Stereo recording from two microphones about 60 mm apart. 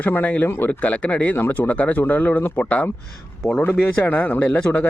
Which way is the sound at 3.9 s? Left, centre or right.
Left.